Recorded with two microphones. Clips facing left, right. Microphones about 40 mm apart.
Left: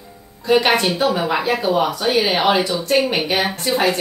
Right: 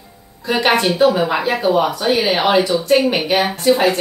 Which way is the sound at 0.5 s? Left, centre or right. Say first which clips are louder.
Even; centre.